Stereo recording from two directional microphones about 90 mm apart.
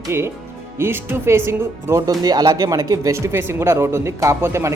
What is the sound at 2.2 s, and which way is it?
Speech, 50° right (ahead or behind).